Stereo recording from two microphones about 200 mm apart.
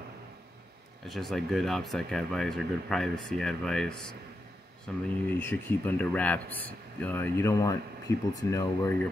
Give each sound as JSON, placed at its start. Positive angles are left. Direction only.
{"t": 1.0, "sound": "speech", "side_deg": 0}